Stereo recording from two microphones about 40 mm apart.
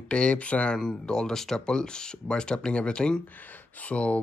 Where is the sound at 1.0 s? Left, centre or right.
Centre.